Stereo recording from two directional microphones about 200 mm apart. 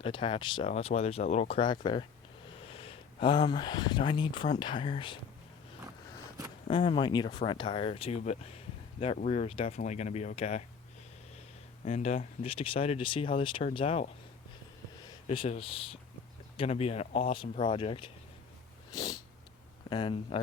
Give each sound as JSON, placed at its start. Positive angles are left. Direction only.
{"t": 0.0, "sound": "speech", "side_deg": 25}
{"t": 6.7, "sound": "speech", "side_deg": 25}
{"t": 11.9, "sound": "speech", "side_deg": 30}
{"t": 18.9, "sound": "cat", "side_deg": 20}
{"t": 19.9, "sound": "speech", "side_deg": 25}